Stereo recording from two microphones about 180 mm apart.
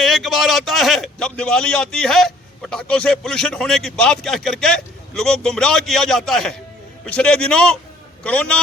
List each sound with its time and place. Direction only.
0.0 s a man's voice: centre (ahead or behind)